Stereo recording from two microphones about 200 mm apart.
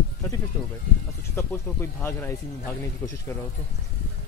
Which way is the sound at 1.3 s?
15° left (ahead or behind).